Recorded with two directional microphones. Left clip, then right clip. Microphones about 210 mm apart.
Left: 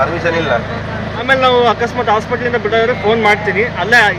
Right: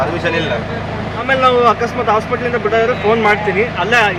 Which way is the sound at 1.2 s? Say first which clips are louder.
Left 1 dB; 5° left (ahead or behind).